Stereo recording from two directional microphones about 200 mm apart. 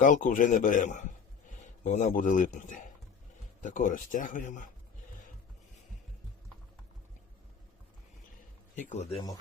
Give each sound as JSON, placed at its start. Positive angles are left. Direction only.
{"t": 0.0, "sound": "a man's voice", "side_deg": 40}
{"t": 8.9, "sound": "a man's voice", "side_deg": 35}